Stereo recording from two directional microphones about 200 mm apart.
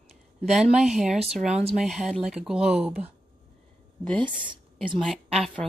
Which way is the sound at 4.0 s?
5° left (ahead or behind).